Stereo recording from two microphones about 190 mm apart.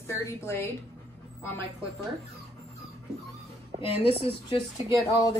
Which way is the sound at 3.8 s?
30° left (ahead or behind).